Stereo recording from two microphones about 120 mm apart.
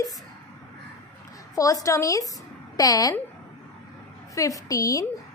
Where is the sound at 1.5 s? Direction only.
30° left (ahead or behind).